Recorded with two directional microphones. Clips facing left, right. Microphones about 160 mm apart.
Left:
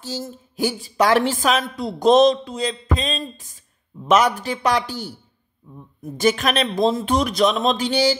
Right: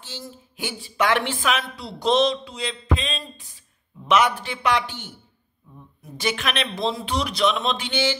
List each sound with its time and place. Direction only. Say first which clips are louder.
0.0 s a woman's voice: left 8 dB; 40° left (ahead or behind)
6.1 s a woman's voice: left 7 dB; 45° left (ahead or behind)